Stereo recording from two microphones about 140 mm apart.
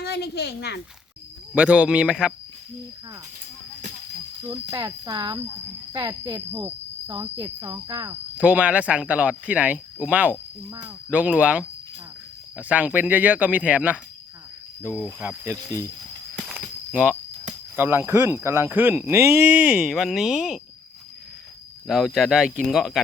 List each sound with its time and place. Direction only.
1.5 s speech: 10° right (ahead or behind)
4.7 s speech: 25° right (ahead or behind)
6.5 s speech: 15° right (ahead or behind)
7.1 s speech: 25° right (ahead or behind)
8.4 s speech: 10° right (ahead or behind)
16.5 s a sound: 10° right (ahead or behind)
17.7 s speech: 15° right (ahead or behind)
21.8 s speech: centre (ahead or behind)